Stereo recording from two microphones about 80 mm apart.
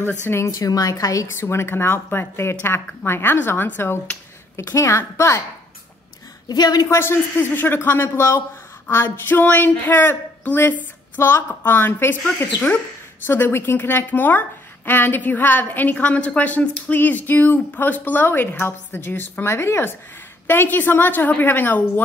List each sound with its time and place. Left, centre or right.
0.0 s a woman's voice: left
1.3 s a woman's voice: left
6.5 s a woman's voice: left
6.9 s a woman's voice: left
13.3 s a woman's voice: left